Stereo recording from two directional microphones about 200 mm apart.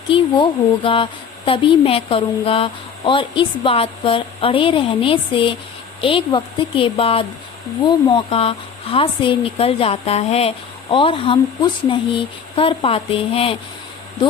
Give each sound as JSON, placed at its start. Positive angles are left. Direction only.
{"t": 0.1, "sound": "speech", "side_deg": 25}